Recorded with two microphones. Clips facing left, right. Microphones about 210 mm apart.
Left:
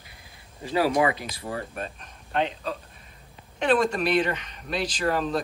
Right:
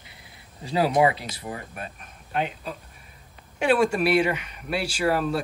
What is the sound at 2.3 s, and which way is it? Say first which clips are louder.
Speech: left 2 dB; 10° right (ahead or behind).